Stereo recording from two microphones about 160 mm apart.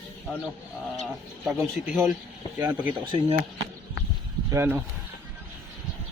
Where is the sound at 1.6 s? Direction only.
Centre (ahead or behind).